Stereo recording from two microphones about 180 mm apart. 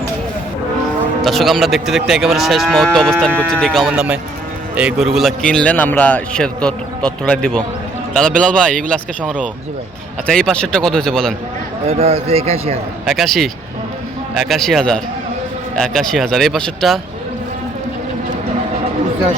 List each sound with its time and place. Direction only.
1.2 s a man's voice: centre (ahead or behind)
3.8 s a man's voice: 5° right (ahead or behind)
11.9 s a man's voice: 35° right (ahead or behind)
13.1 s a man's voice: centre (ahead or behind)